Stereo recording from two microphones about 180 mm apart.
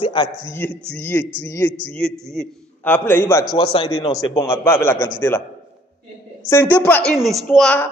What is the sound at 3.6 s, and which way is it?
Speech, 30° left (ahead or behind).